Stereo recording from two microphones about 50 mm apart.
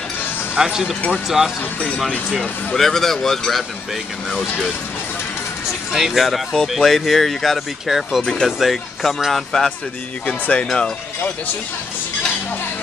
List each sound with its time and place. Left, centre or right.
0.6 s speech: centre
2.7 s speech: centre
5.9 s speech: centre
10.4 s speech: left